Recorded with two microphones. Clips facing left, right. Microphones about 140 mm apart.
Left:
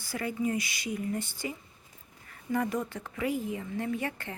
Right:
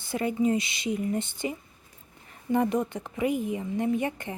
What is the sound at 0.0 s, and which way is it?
A woman's voice, 20° right (ahead or behind).